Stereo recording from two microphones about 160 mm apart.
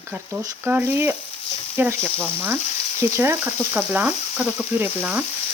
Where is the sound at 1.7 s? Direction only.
15° right (ahead or behind).